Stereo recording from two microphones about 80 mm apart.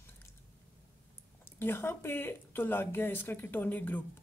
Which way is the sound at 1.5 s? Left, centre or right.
Left.